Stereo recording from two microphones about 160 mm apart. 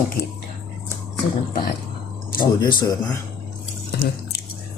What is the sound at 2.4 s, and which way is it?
Speech, 30° left (ahead or behind).